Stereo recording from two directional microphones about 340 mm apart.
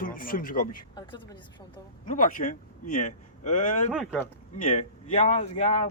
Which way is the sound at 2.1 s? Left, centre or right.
Left.